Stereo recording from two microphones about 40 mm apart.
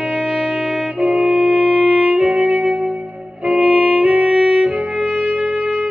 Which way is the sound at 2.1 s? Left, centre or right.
Right.